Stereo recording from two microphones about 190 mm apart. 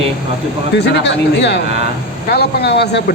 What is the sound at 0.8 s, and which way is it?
Speech, 65° left (ahead or behind).